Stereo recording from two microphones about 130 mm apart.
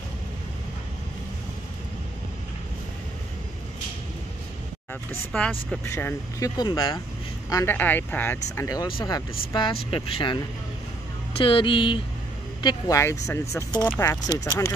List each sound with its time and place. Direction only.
5.3 s speech: 5° left (ahead or behind)
5.9 s speech: 20° left (ahead or behind)
6.6 s speech: 35° left (ahead or behind)
7.7 s speech: 15° left (ahead or behind)
8.8 s speech: 35° left (ahead or behind)
12.6 s speech: 25° left (ahead or behind)
14.2 s speech: 25° left (ahead or behind)